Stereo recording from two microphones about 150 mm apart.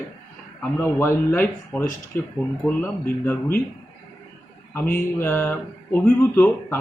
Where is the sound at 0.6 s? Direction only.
15° left (ahead or behind).